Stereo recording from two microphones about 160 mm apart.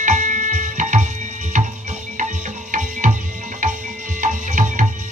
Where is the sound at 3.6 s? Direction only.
50° right (ahead or behind).